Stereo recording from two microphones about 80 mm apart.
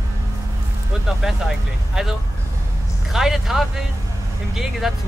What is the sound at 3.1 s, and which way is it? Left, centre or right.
Speech, centre.